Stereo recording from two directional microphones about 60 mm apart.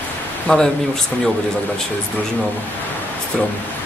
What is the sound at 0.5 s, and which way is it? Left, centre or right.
Speech, centre.